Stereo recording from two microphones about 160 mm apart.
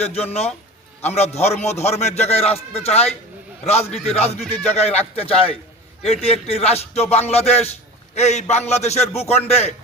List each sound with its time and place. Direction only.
0.0 s a man's voice: 40° left (ahead or behind)